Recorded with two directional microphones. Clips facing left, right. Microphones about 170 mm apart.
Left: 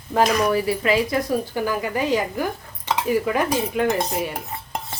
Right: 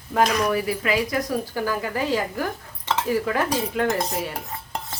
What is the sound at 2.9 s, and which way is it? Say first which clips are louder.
Dishes: left 2 dB; 15° left (ahead or behind).